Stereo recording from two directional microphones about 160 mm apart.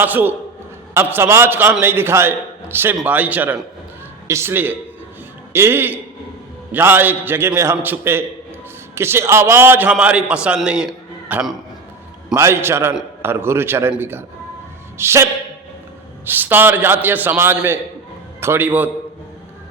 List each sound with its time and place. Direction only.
0.0 s a man's voice: 10° right (ahead or behind)
12.3 s a man's voice: 15° right (ahead or behind)